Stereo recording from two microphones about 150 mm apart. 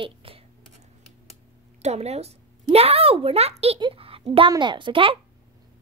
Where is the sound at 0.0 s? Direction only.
40° right (ahead or behind).